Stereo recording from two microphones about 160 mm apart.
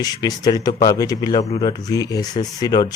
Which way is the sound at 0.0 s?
25° left (ahead or behind).